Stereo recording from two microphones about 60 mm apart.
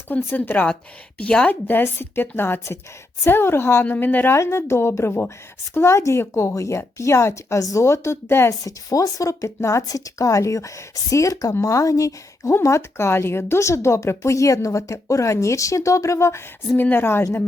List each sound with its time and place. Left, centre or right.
0.1 s speech: left
1.2 s a woman's voice: centre
1.5 s a woman's voice: left
3.2 s a woman's voice: left
4.4 s a woman's voice: left
8.6 s speech: left
12.5 s speech: left
16.7 s a woman's voice: left